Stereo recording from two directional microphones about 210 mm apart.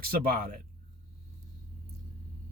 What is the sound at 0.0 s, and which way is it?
Speech, 45° right (ahead or behind).